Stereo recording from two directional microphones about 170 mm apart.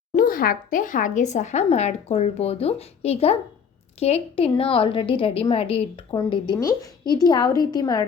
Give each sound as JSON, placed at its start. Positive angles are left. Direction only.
{"t": 0.1, "sound": "a woman's voice", "side_deg": 55}